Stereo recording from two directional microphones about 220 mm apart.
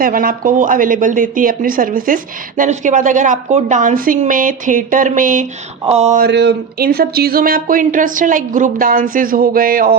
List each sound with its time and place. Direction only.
0.0 s speech: 40° right (ahead or behind)
6.2 s speech: 50° right (ahead or behind)